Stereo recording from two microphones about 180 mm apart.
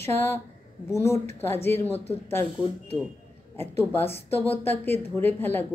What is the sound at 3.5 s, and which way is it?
Speech, 15° left (ahead or behind).